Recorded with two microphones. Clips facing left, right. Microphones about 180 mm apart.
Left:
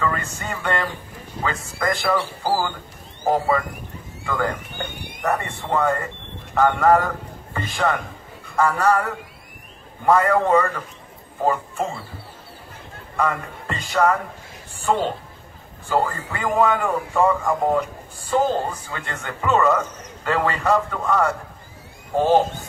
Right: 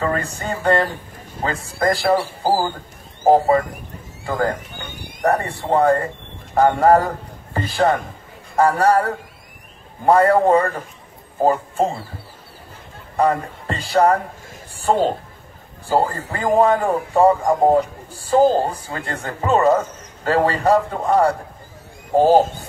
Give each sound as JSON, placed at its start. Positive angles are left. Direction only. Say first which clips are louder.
{"t": 0.0, "sound": "a man's voice", "louder": "right 3 dB", "side_deg": -35}
{"t": 13.1, "sound": "a man's voice", "louder": "right 5 dB", "side_deg": -35}